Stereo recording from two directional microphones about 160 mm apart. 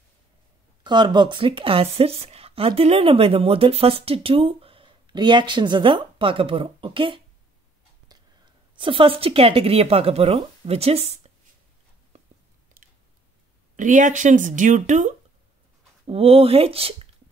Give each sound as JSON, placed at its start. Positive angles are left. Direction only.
{"t": 0.8, "sound": "speech", "side_deg": -30}
{"t": 8.7, "sound": "speech", "side_deg": -30}
{"t": 12.8, "sound": "chewing", "side_deg": -65}
{"t": 13.7, "sound": "a woman's voice", "side_deg": -50}
{"t": 16.1, "sound": "speech", "side_deg": -35}